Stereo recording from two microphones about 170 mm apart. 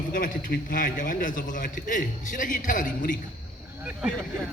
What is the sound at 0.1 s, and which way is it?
A man's voice, 55° left (ahead or behind).